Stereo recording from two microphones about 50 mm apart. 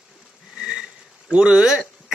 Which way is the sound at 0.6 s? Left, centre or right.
Centre.